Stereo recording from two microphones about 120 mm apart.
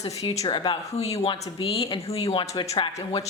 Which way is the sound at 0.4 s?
40° left (ahead or behind).